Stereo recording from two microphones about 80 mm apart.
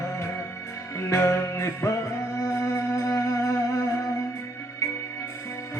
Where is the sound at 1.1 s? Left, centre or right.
Left.